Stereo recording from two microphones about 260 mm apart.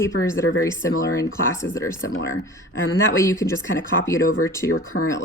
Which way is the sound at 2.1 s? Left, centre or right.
Left.